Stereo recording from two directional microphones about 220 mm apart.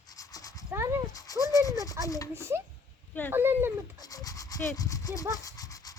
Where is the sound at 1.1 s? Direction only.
15° left (ahead or behind).